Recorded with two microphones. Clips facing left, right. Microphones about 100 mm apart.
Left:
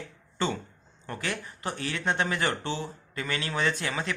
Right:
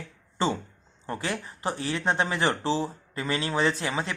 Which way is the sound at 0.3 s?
30° right (ahead or behind).